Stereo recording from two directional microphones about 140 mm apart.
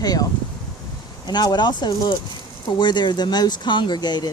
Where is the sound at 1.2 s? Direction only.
30° left (ahead or behind).